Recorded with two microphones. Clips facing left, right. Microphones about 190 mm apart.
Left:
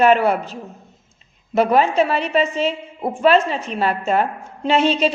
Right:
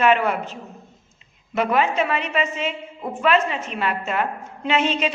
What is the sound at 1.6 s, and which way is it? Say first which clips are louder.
A woman's voice: left 5 dB; 35° left (ahead or behind).